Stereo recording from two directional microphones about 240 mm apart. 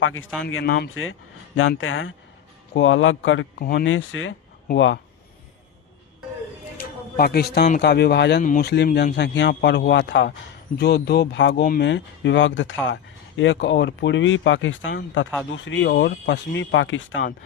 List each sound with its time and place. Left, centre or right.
0.0 s speech: left
3.6 s speech: left
3.8 s speech: left
6.7 s speech: left